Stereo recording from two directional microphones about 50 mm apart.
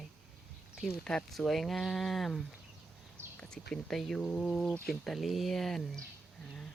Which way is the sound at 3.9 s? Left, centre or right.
Centre.